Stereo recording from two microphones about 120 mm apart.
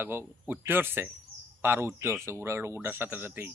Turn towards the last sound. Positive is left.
turn(degrees=-20)  # may be behind; listen again after turning